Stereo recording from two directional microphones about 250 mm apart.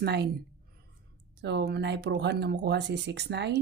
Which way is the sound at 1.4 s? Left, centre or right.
Right.